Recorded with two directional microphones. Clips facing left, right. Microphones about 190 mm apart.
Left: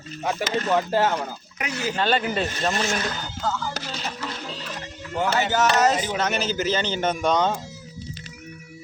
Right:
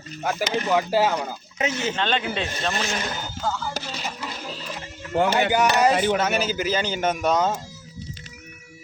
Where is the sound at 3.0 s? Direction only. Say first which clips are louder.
Even; 10° right (ahead or behind).